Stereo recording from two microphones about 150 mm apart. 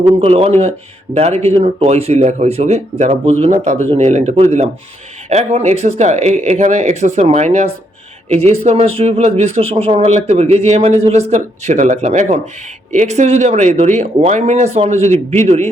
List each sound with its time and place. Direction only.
0.2 s speech: 40° right (ahead or behind)